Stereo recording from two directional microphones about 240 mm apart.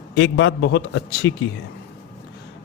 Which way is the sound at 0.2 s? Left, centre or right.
Left.